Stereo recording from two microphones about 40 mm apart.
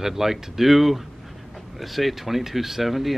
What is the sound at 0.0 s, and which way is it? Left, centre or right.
Speech, centre.